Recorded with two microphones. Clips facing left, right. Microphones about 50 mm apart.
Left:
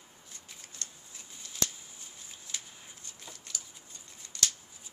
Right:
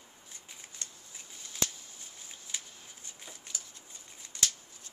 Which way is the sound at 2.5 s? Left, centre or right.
Centre.